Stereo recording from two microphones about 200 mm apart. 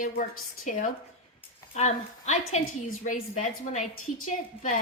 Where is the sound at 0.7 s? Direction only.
40° left (ahead or behind).